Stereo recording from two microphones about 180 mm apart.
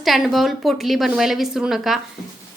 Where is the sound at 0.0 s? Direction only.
Centre (ahead or behind).